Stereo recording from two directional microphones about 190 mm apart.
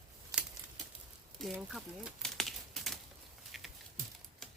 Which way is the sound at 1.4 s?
Centre (ahead or behind).